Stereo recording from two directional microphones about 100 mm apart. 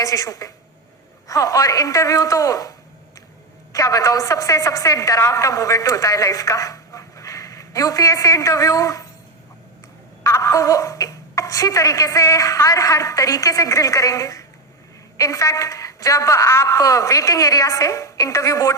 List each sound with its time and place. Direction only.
0.0 s a woman's voice: 35° left (ahead or behind)
10.2 s speech: 30° left (ahead or behind)